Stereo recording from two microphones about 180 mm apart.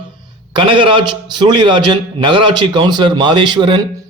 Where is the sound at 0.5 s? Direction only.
25° right (ahead or behind).